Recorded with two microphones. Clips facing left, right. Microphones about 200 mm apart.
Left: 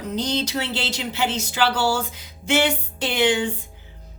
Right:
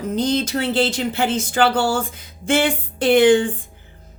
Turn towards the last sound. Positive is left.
turn(degrees=-55)  # may be behind; listen again after turning